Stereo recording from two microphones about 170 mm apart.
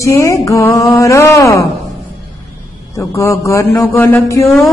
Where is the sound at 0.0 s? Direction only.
15° left (ahead or behind).